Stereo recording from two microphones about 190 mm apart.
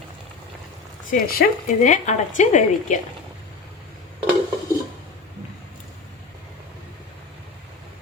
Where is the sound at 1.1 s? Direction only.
45° left (ahead or behind).